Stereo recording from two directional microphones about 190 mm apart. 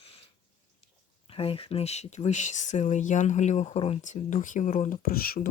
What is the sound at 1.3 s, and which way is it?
Speech, 30° left (ahead or behind).